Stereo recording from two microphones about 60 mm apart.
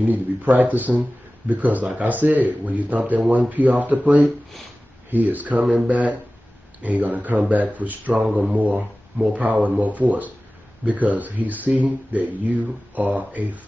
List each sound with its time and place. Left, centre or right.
0.0 s speech: right